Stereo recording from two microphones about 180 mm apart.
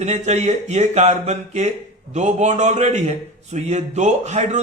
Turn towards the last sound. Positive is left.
turn(degrees=-40)  # may be behind; listen again after turning